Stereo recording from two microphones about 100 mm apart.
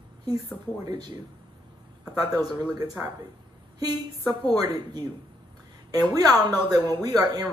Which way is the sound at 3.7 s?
40° right (ahead or behind).